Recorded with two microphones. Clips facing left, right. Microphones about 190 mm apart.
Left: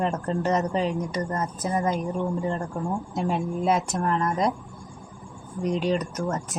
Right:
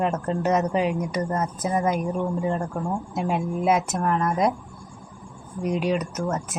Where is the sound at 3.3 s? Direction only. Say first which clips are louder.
Right 2 dB; centre (ahead or behind).